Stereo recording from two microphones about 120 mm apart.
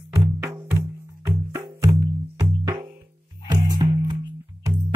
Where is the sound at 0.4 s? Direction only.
20° right (ahead or behind).